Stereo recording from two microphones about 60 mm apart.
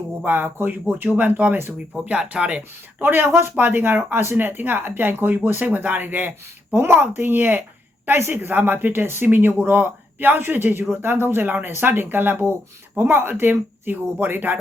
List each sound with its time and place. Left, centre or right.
0.3 s speech: right; by 2.6 s centre
3.0 s speech: right